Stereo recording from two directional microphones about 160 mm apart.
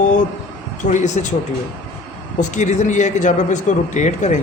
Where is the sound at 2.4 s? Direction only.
50° left (ahead or behind).